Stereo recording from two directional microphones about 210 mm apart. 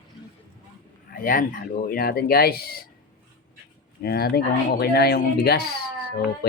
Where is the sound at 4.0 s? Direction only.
45° left (ahead or behind).